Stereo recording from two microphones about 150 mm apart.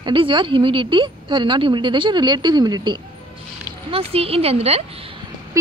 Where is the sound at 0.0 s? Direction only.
35° right (ahead or behind).